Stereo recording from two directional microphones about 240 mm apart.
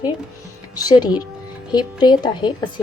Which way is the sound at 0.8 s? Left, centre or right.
Centre.